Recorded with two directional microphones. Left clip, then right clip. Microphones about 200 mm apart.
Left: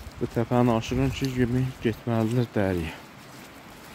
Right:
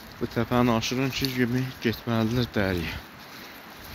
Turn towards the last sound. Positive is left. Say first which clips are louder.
# even
turn(degrees=25)  # may be behind; listen again after turning